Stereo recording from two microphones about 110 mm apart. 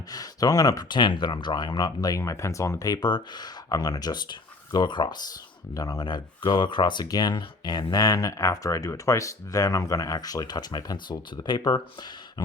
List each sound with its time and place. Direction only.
0.1 s speech: 35° left (ahead or behind)